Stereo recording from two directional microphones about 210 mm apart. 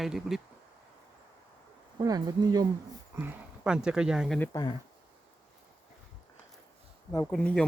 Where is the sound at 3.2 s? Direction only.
5° right (ahead or behind).